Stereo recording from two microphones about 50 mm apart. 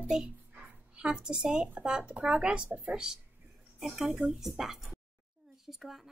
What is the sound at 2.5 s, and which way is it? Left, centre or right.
Speech, right.